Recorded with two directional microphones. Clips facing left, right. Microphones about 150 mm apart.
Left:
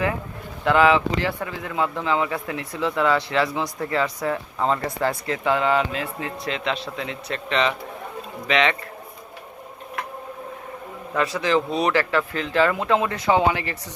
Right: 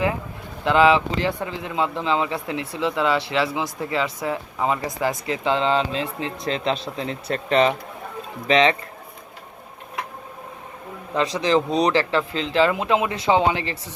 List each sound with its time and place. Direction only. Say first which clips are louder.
0.6 s speech: right 1 dB; 20° right (ahead or behind)
11.1 s a man's voice: right 1 dB; 15° right (ahead or behind)
11.3 s speech: right 3 dB; 30° right (ahead or behind)